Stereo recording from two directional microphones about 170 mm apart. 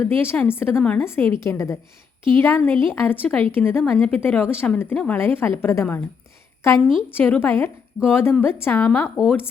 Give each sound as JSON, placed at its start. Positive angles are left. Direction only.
{"t": 0.0, "sound": "a woman's voice", "side_deg": 15}
{"t": 9.0, "sound": "speech", "side_deg": -5}